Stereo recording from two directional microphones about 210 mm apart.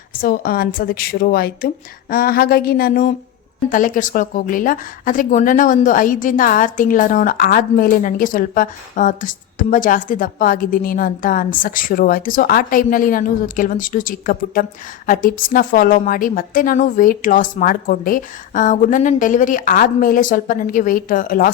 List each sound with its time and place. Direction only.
0.1 s a woman's voice: 45° left (ahead or behind)